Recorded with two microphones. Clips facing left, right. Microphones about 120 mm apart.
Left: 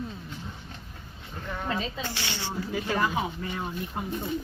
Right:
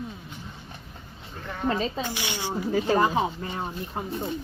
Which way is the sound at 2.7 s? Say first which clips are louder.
Right 6 dB; 30° right (ahead or behind).